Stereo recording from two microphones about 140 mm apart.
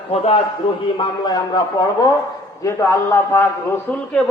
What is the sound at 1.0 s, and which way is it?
A man's voice, 30° left (ahead or behind).